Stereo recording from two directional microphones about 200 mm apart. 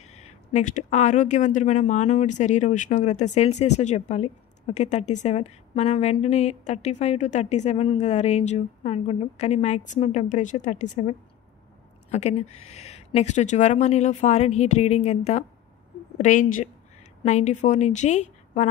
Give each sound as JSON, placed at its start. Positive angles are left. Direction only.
{"t": 0.0, "sound": "a woman's voice", "side_deg": 35}